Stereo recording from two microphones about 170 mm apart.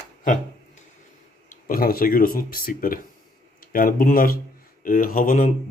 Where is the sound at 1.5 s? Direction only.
55° left (ahead or behind).